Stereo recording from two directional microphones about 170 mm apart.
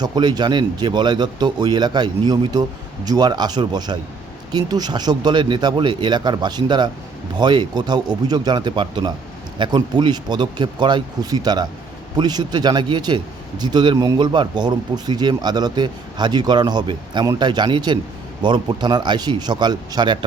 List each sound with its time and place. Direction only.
0.0 s speech: 25° right (ahead or behind)